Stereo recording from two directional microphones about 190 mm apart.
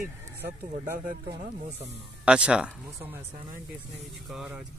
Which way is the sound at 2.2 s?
5° right (ahead or behind).